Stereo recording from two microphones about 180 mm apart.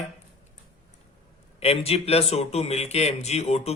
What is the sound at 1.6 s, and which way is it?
Speech, 35° left (ahead or behind).